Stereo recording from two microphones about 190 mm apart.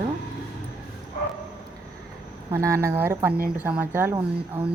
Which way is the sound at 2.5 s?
15° right (ahead or behind).